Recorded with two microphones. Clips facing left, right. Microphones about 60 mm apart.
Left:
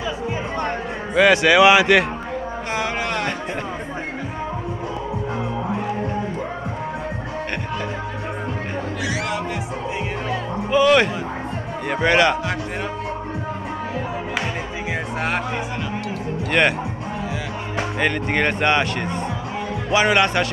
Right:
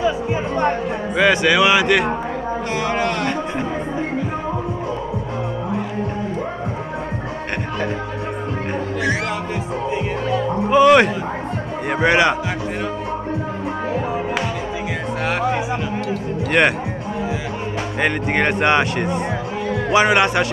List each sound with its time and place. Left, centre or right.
1.1 s speech: centre
2.8 s a sound: centre
10.7 s music: right
11.9 s a man's voice: centre
15.2 s music: centre
16.6 s speech: centre
18.0 s speech: centre